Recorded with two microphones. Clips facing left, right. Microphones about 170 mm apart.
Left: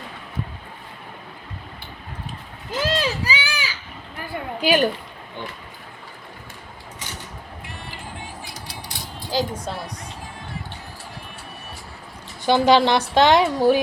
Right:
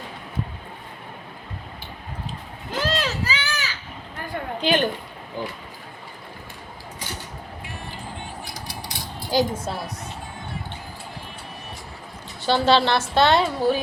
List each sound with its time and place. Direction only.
2.8 s a sound: 10° left (ahead or behind)
5.4 s speech: 35° right (ahead or behind)
9.3 s a woman's voice: 5° right (ahead or behind)
12.5 s a woman's voice: 15° left (ahead or behind)